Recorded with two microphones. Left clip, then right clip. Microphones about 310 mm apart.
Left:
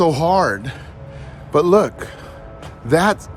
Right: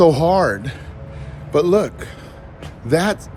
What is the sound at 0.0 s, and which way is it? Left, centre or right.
Speech, centre.